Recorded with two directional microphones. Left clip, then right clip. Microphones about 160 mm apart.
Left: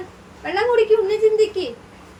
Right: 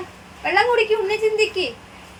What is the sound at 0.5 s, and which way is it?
A woman's voice, 25° right (ahead or behind).